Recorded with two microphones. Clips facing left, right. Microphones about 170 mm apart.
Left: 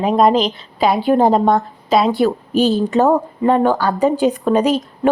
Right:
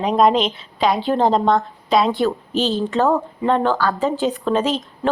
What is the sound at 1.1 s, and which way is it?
Speech, 15° left (ahead or behind).